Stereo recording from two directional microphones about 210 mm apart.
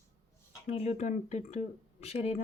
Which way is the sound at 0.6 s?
30° left (ahead or behind).